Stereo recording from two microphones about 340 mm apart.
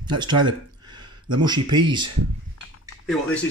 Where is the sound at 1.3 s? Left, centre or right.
Centre.